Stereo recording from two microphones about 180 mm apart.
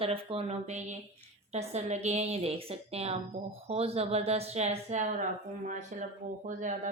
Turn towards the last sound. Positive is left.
turn(degrees=-45)  # may be behind; listen again after turning